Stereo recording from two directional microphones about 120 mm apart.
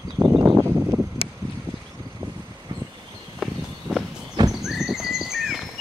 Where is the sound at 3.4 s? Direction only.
Centre (ahead or behind).